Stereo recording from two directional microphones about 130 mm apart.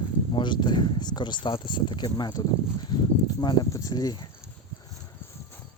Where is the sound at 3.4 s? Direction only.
30° left (ahead or behind).